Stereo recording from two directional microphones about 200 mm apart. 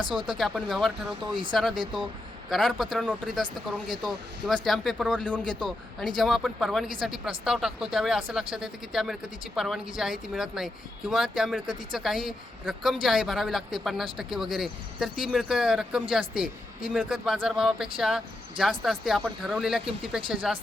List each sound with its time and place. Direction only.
0.0 s speech: 25° right (ahead or behind)
0.3 s speech: centre (ahead or behind)
1.0 s speech: 25° right (ahead or behind)
2.5 s speech: centre (ahead or behind)
4.4 s speech: centre (ahead or behind)